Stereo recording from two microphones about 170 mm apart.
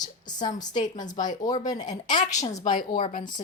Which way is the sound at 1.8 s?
45° left (ahead or behind).